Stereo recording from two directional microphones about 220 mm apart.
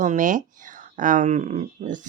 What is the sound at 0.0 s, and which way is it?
Speech, 35° right (ahead or behind).